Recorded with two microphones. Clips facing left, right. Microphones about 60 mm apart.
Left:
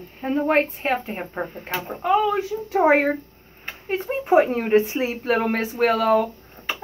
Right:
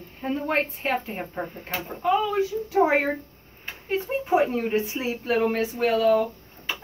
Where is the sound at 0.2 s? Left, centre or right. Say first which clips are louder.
Left 5 dB; left.